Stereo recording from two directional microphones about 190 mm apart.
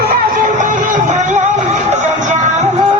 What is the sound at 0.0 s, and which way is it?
Music, 45° right (ahead or behind).